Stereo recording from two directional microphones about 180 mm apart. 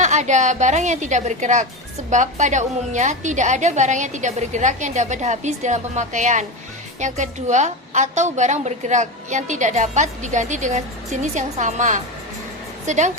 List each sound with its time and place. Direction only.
0.0 s a woman's voice: 40° right (ahead or behind)